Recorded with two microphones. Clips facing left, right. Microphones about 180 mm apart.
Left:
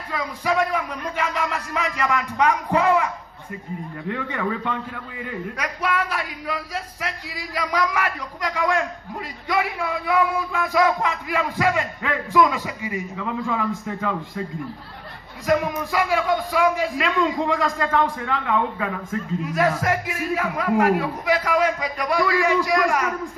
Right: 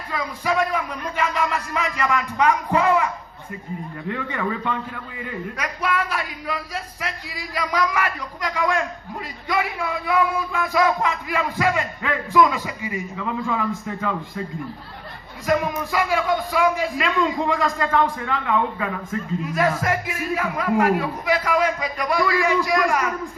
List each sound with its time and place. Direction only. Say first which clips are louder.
0.1 s speech: even; 65° left (ahead or behind)
4.1 s a man's voice: even; 60° left (ahead or behind)
15.4 s speech: even; 70° left (ahead or behind)
19.4 s speech: left 1 dB; 70° left (ahead or behind)